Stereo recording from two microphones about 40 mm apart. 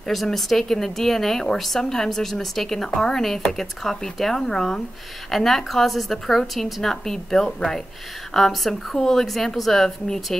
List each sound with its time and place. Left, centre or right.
0.0 s a woman's voice: centre